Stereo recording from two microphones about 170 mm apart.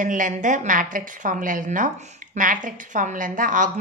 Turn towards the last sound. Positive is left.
turn(degrees=-50)  # may be behind; listen again after turning